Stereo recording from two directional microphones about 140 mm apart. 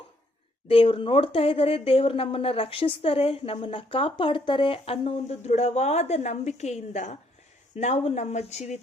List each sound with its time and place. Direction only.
0.7 s speech: 40° left (ahead or behind)